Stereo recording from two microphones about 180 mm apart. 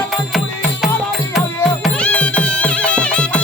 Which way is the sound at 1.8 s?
5° left (ahead or behind).